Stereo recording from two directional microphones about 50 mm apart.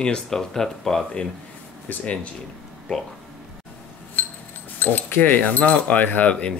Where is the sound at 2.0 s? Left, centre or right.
Left.